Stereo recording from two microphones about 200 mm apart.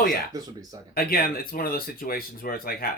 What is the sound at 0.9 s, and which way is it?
Speech, 50° left (ahead or behind).